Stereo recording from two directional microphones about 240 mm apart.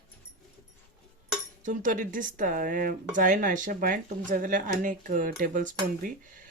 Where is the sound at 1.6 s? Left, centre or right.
Right.